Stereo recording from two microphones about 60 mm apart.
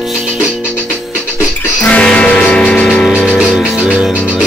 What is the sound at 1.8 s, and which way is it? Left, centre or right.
Music, centre.